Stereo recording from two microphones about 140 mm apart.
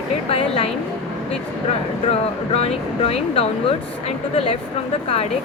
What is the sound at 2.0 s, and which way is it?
Speech, 45° left (ahead or behind).